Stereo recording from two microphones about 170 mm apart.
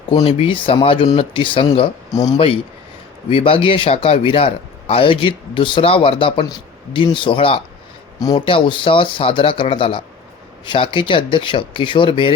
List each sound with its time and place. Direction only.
0.1 s a man's voice: 30° left (ahead or behind)